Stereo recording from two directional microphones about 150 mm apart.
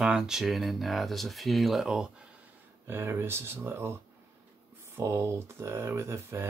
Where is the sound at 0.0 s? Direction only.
5° right (ahead or behind).